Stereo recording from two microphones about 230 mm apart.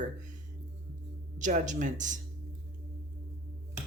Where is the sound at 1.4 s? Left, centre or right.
Right.